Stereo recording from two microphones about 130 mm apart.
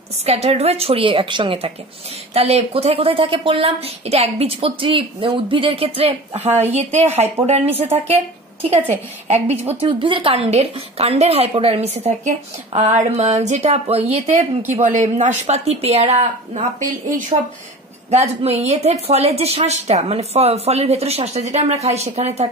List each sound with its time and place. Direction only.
0.2 s a woman's voice: 55° right (ahead or behind)
2.3 s a woman's voice: 55° right (ahead or behind)
9.8 s a woman's voice: 40° right (ahead or behind); by 14.4 s 55° right (ahead or behind)
14.8 s speech: 70° right (ahead or behind)
18.1 s speech: 55° right (ahead or behind)